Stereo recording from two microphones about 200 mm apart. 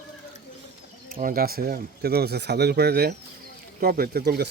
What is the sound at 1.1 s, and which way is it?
Speech, 45° right (ahead or behind).